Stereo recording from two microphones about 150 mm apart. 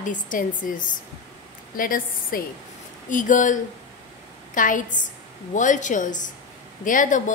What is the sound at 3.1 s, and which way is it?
A woman's voice, 60° left (ahead or behind).